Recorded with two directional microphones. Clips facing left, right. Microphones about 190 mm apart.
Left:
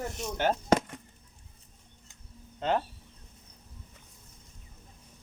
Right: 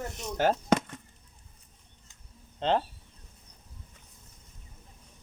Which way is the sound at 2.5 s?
30° right (ahead or behind).